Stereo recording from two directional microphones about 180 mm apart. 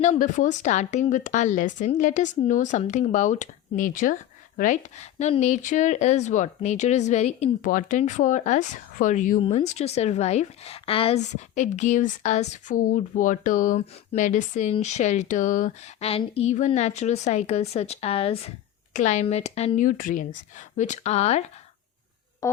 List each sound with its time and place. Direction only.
0.0 s speech: 45° left (ahead or behind)
11.3 s speech: 40° left (ahead or behind)